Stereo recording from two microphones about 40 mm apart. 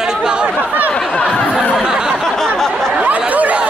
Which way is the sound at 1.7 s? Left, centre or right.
Centre.